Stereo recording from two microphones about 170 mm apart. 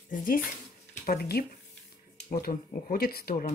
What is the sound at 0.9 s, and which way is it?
Speech, 55° left (ahead or behind).